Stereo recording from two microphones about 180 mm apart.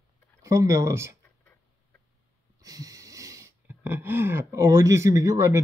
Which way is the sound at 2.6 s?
20° right (ahead or behind).